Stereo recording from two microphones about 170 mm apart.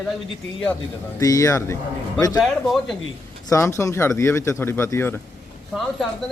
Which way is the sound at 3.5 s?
15° left (ahead or behind).